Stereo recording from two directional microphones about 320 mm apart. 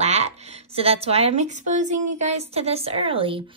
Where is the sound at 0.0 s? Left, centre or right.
Centre.